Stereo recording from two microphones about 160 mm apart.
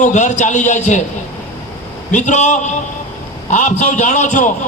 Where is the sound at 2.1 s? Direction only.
45° left (ahead or behind).